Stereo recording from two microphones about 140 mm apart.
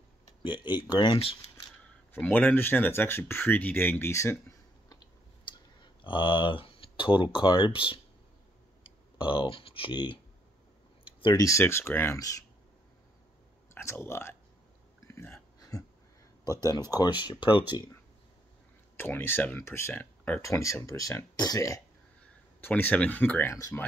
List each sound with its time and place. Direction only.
0.4 s speech: 35° left (ahead or behind)
2.1 s speech: 15° left (ahead or behind)
5.5 s clicking: 35° left (ahead or behind)
7.2 s speech: 35° left (ahead or behind)
9.3 s speech: 40° left (ahead or behind)
11.1 s clicking: 40° left (ahead or behind)
11.3 s speech: 20° left (ahead or behind)
13.7 s speech: 20° left (ahead or behind)
15.0 s a sound: 15° left (ahead or behind)
16.4 s speech: 30° left (ahead or behind)
18.9 s speech: 15° left (ahead or behind)
22.6 s speech: 15° left (ahead or behind)